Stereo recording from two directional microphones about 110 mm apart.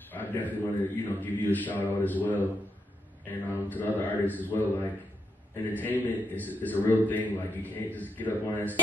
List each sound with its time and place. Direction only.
0.1 s a man's voice: 15° left (ahead or behind)